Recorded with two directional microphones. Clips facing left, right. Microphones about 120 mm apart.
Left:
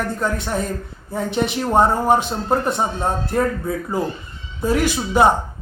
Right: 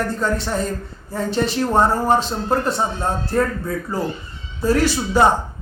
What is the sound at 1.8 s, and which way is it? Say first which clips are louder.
Speech: left 2 dB; 20° left (ahead or behind).